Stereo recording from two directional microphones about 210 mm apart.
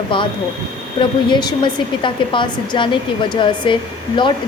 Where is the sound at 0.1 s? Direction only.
25° left (ahead or behind).